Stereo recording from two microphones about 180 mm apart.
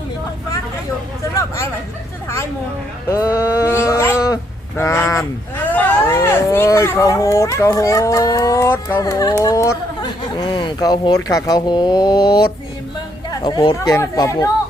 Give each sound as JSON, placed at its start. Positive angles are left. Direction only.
{"t": 1.4, "sound": "speech", "side_deg": 15}
{"t": 3.1, "sound": "a sound", "side_deg": 15}
{"t": 5.7, "sound": "speech", "side_deg": 10}
{"t": 13.4, "sound": "speech", "side_deg": 25}